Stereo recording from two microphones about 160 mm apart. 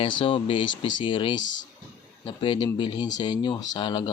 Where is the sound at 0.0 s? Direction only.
35° left (ahead or behind).